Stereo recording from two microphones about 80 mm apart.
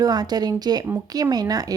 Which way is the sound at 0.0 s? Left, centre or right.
Right.